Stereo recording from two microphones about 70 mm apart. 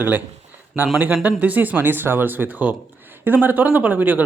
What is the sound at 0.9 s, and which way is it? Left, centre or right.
Speech, right.